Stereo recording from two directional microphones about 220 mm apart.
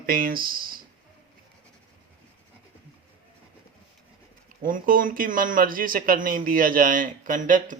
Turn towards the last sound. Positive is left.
turn(degrees=-35)  # may be behind; listen again after turning